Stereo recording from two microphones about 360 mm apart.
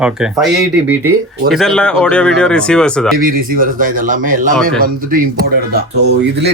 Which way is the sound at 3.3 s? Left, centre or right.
Right.